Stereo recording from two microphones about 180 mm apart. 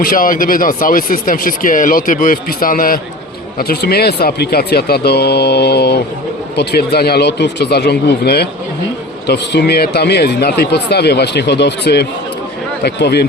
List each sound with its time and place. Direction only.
0.0 s speech: 50° left (ahead or behind)